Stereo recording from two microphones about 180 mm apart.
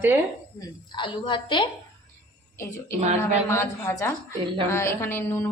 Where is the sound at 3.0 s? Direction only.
40° right (ahead or behind).